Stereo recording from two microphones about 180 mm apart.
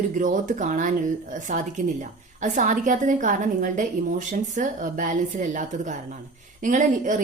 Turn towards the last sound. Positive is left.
turn(degrees=-45)  # may be behind; listen again after turning